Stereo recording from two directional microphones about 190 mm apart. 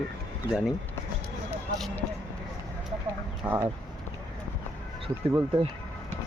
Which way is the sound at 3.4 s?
10° right (ahead or behind).